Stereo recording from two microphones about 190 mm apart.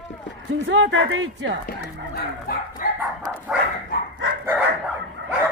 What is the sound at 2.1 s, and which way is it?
Bow-wow, 50° left (ahead or behind).